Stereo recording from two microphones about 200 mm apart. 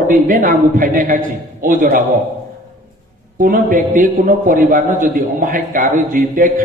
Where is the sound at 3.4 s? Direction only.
45° right (ahead or behind).